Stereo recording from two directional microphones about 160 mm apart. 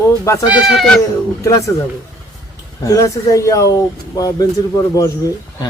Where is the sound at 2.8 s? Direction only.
20° left (ahead or behind).